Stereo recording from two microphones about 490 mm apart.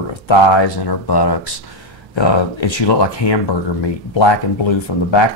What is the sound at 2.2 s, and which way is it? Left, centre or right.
Speech, left.